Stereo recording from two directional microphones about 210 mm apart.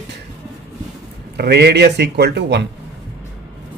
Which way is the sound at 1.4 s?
50° right (ahead or behind).